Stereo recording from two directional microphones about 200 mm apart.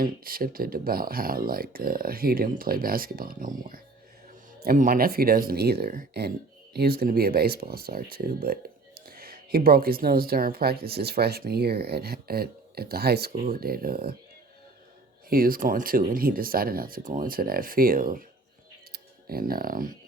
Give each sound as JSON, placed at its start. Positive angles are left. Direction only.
{"t": 0.0, "sound": "speech", "side_deg": -45}
{"t": 4.6, "sound": "speech", "side_deg": -45}
{"t": 15.3, "sound": "speech", "side_deg": -45}